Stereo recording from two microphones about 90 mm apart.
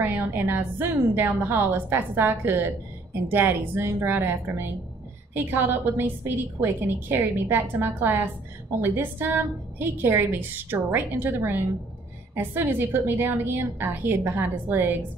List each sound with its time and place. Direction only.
0.0 s a woman's voice: 25° right (ahead or behind)